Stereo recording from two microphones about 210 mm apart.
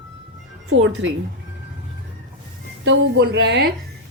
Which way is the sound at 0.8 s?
65° right (ahead or behind).